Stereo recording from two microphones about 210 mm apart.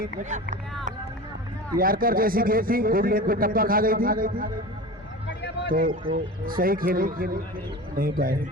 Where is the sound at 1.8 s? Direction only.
45° right (ahead or behind).